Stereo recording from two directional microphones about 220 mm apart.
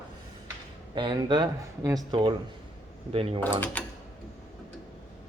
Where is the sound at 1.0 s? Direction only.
20° right (ahead or behind).